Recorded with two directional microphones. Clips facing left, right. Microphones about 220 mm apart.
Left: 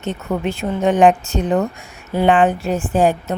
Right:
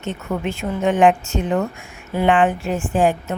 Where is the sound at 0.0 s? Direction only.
35° left (ahead or behind).